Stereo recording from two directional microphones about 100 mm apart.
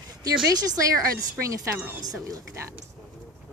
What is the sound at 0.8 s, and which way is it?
Speech, 35° right (ahead or behind).